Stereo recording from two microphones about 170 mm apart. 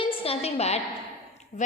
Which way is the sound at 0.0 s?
35° left (ahead or behind).